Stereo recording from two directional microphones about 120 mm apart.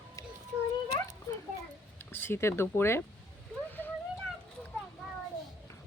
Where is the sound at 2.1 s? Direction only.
20° left (ahead or behind).